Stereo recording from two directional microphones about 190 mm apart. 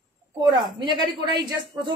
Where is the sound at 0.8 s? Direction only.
25° right (ahead or behind).